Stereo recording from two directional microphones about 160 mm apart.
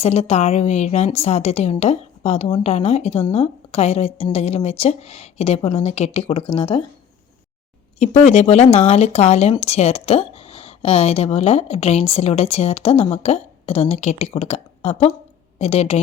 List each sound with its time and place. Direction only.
0.0 s speech: 40° left (ahead or behind)
7.9 s a woman's voice: 45° left (ahead or behind)